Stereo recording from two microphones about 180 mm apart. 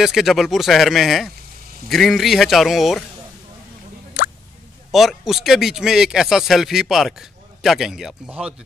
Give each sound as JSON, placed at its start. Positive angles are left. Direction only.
{"t": 0.0, "sound": "speech", "side_deg": 0}
{"t": 4.2, "sound": "a sound", "side_deg": 50}
{"t": 4.9, "sound": "speech", "side_deg": 0}